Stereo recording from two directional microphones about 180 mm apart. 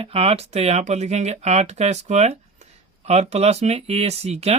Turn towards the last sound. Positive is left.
turn(degrees=-35)  # may be behind; listen again after turning